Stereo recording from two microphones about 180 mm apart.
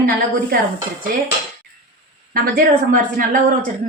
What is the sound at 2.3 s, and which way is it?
Speech, 50° right (ahead or behind).